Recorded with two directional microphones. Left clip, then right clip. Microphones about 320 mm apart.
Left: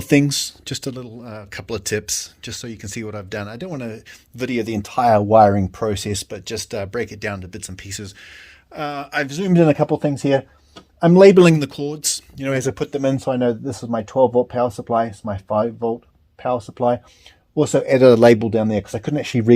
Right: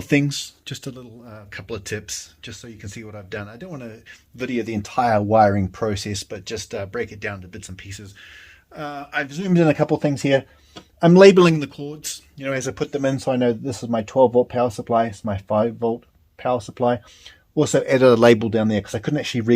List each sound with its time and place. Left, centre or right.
0.0 s speech: left; by 11.4 s centre
11.4 s speech: left
13.4 s speech: centre